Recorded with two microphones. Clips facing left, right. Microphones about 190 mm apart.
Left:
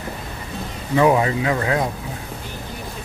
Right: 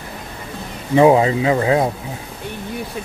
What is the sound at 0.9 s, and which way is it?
Speech, 25° right (ahead or behind).